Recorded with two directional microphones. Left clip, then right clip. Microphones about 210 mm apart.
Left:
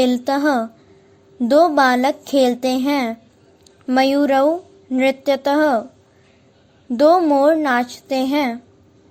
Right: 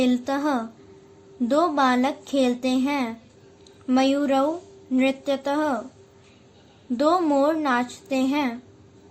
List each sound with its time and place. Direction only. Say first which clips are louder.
0.0 s a child's voice: left 6 dB; 35° left (ahead or behind)
6.9 s a child's voice: left 7 dB; 30° left (ahead or behind)